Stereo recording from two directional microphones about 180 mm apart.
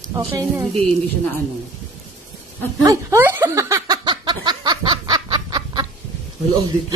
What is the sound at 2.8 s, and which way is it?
Laughter, 15° right (ahead or behind).